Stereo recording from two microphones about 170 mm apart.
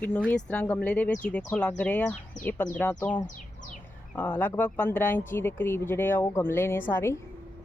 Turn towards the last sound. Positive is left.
turn(degrees=15)  # may be behind; listen again after turning